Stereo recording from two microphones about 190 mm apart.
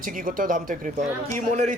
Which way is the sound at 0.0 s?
45° right (ahead or behind).